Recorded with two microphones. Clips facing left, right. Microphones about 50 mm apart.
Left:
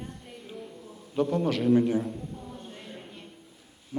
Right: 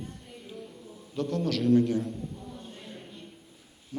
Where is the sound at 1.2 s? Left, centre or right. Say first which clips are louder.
Left 3 dB; centre.